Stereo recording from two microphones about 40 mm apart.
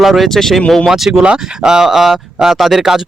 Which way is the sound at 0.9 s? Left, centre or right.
Centre.